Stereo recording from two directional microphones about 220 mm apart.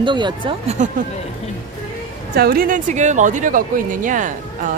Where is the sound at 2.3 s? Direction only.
45° right (ahead or behind).